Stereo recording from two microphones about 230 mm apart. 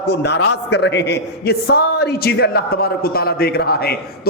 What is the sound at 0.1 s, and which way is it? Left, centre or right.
A man's voice, left.